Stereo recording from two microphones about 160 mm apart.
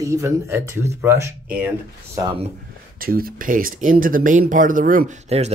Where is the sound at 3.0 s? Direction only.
65° right (ahead or behind).